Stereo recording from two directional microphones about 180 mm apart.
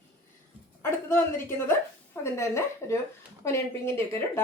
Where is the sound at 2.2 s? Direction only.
15° left (ahead or behind).